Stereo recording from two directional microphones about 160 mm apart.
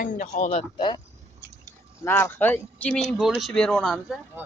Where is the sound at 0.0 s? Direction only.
55° left (ahead or behind).